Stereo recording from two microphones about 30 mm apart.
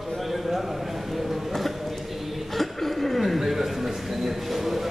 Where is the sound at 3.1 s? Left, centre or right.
Centre.